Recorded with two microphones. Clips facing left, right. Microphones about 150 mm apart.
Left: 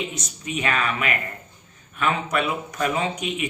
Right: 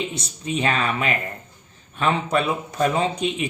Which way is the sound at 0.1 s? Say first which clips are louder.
Right 4 dB; 30° right (ahead or behind).